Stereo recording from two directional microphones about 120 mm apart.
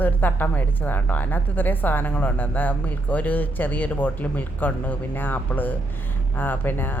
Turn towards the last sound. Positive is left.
turn(degrees=15)  # may be behind; listen again after turning